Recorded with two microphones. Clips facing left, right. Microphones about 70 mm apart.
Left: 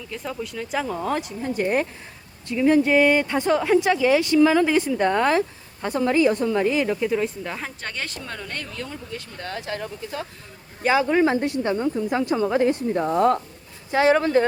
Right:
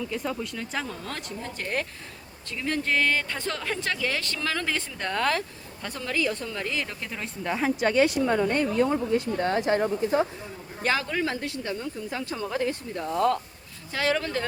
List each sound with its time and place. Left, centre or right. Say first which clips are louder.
0.0 s speech: right 1 dB; centre; by 10.2 s right
10.8 s speech: left 7 dB; centre
11.1 s a woman's voice: left 9 dB; left